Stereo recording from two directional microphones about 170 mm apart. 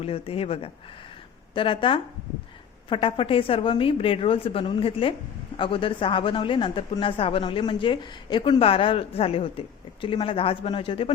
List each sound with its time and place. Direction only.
0.0 s speech: 35° left (ahead or behind)